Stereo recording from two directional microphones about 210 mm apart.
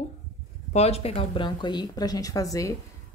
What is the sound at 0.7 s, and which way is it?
Speech, 30° left (ahead or behind).